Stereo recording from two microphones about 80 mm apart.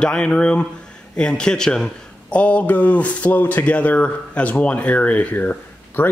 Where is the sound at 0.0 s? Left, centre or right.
Centre.